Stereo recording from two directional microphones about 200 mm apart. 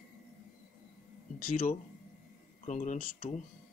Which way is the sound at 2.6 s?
35° left (ahead or behind).